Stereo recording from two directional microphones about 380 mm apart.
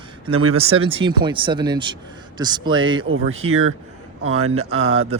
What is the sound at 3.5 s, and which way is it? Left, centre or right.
Speech, right.